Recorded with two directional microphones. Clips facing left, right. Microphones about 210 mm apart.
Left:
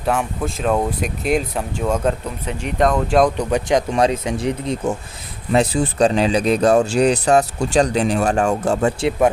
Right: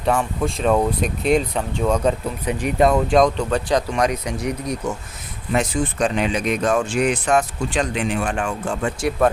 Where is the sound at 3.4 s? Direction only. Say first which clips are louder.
Left 2 dB; 15° left (ahead or behind); by 8.9 s 40° left (ahead or behind).